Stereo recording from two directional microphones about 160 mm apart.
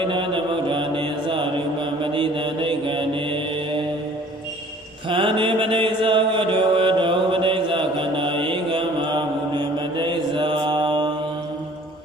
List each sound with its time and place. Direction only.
0.7 s mantra: 30° right (ahead or behind)
5.0 s mantra: 30° right (ahead or behind)